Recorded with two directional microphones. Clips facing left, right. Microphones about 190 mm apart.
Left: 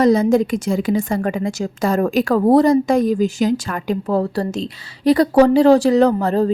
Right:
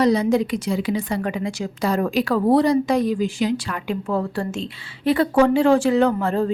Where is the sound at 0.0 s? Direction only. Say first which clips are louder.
Left 4 dB; 45° left (ahead or behind).